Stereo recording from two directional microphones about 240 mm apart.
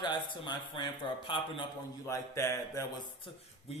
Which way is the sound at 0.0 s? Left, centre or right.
Centre.